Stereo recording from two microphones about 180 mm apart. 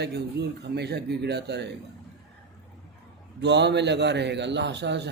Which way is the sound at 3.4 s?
70° right (ahead or behind).